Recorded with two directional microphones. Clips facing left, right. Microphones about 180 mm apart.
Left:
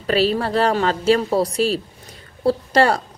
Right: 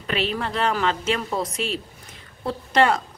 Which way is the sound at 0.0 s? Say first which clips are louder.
Left 7 dB; 35° left (ahead or behind).